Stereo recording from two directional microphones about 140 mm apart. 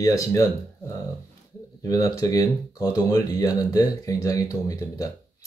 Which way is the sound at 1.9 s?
25° left (ahead or behind).